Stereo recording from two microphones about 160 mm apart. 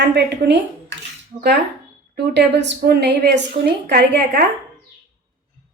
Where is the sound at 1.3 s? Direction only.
40° right (ahead or behind).